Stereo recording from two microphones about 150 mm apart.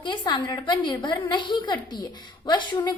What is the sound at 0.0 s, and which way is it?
A woman's voice, 30° left (ahead or behind).